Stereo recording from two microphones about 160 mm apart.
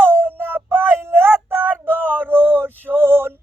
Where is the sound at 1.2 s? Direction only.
15° right (ahead or behind).